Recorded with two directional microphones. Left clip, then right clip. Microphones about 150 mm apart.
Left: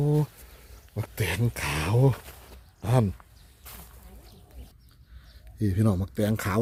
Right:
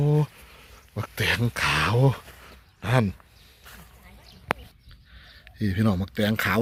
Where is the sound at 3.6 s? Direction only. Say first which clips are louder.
Right 1 dB; 20° left (ahead or behind).